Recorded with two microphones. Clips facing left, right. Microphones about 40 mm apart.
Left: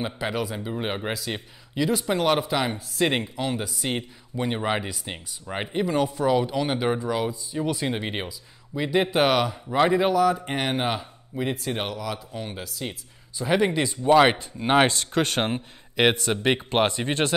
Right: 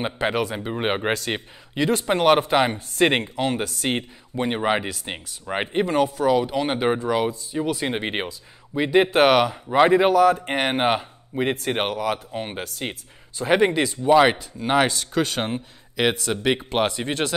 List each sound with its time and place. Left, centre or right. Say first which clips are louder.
0.0 s speech: right 4 dB; right
6.3 s speech: right 2 dB; centre; by 12.6 s right
13.4 s speech: right 3 dB; right
14.0 s speech: right 1 dB; centre
14.4 s speech: even; left
14.9 s speech: right 1 dB; left
15.4 s a man's voice: even; centre